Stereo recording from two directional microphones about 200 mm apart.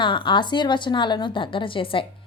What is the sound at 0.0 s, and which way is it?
Speech, 25° left (ahead or behind).